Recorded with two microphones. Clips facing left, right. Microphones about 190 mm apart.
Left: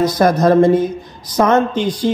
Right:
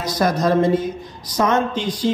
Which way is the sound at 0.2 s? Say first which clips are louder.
Left 5 dB; 55° left (ahead or behind).